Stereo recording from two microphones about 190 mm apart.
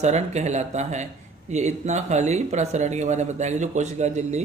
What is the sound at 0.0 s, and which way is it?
Speech, 35° right (ahead or behind).